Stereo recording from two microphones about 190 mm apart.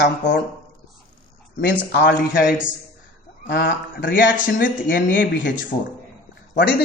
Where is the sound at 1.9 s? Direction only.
45° left (ahead or behind).